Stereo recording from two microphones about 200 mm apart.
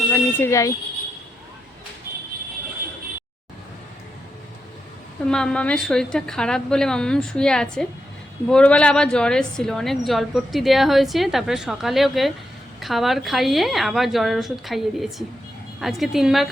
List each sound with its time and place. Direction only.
0.1 s speech: 10° left (ahead or behind)
5.3 s a woman's voice: 5° left (ahead or behind)